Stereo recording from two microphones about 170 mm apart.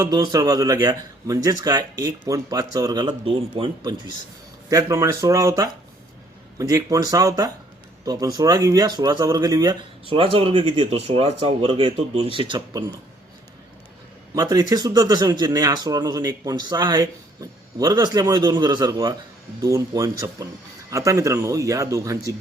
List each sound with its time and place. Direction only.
0.0 s speech: 25° right (ahead or behind)
14.3 s speech: 25° right (ahead or behind)